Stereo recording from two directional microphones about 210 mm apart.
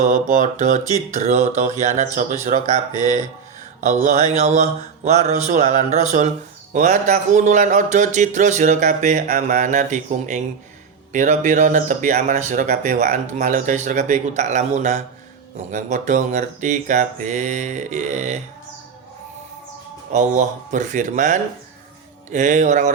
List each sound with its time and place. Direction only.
0.0 s speech: 35° right (ahead or behind)
3.8 s mantra: 35° right (ahead or behind)
4.4 s speech: 35° right (ahead or behind)
20.1 s speech: 35° right (ahead or behind)